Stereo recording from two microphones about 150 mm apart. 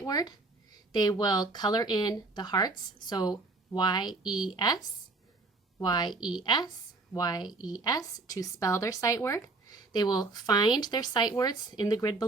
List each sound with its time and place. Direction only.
0.0 s speech: 25° left (ahead or behind)
6.1 s a woman's voice: 5° right (ahead or behind)
6.4 s speech: 30° left (ahead or behind)